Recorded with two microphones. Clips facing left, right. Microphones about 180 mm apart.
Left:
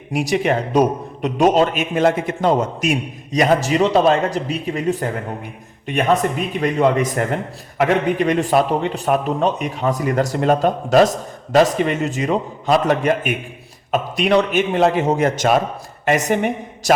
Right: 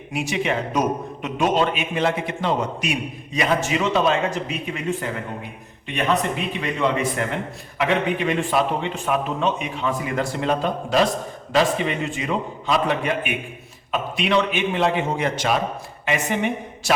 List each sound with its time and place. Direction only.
0.1 s a man's voice: 40° left (ahead or behind)